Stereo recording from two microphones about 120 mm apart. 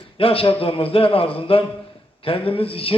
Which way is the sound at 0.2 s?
50° left (ahead or behind).